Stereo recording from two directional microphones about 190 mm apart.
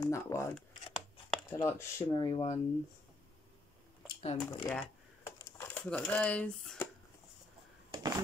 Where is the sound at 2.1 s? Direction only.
25° left (ahead or behind).